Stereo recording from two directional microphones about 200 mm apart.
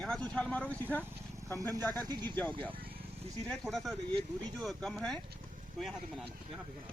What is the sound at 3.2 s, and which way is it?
Speech, 30° right (ahead or behind).